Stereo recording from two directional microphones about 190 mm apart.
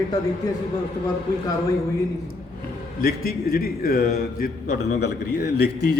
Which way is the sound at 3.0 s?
50° left (ahead or behind).